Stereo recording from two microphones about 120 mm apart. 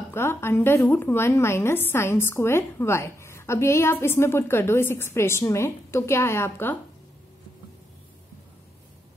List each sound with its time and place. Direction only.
0.1 s a woman's voice: 20° left (ahead or behind)